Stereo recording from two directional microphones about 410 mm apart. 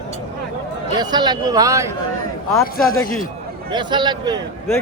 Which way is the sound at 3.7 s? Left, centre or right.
Centre.